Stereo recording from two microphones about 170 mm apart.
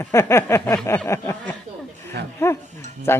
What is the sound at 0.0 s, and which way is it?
Speech, 15° left (ahead or behind).